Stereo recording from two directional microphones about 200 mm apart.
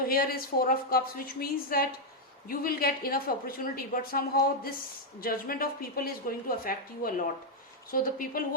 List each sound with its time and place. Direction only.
0.0 s a woman's voice: 50° left (ahead or behind)